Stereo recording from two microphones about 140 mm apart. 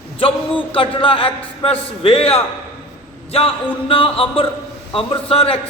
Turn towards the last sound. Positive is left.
turn(degrees=40)  # may be behind; listen again after turning